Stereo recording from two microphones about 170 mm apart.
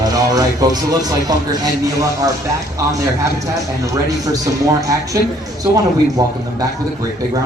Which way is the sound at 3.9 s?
20° right (ahead or behind).